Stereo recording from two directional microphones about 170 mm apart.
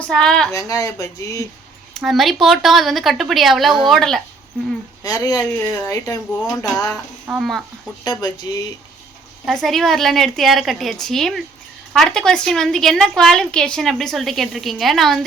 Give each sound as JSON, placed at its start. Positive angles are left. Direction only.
{"t": 0.0, "sound": "a woman's voice", "side_deg": 5}
{"t": 0.5, "sound": "speech", "side_deg": 20}
{"t": 1.9, "sound": "a woman's voice", "side_deg": 0}
{"t": 5.0, "sound": "speech", "side_deg": 20}
{"t": 7.3, "sound": "a woman's voice", "side_deg": 0}
{"t": 8.0, "sound": "speech", "side_deg": 25}
{"t": 9.5, "sound": "a woman's voice", "side_deg": 0}